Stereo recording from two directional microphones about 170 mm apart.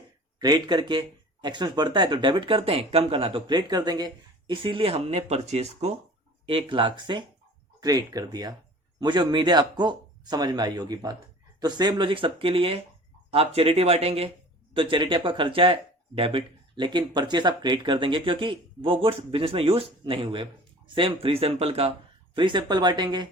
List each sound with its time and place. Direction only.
0.3 s speech: 25° right (ahead or behind)